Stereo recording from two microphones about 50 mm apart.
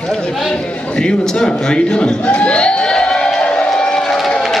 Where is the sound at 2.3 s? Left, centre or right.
Left.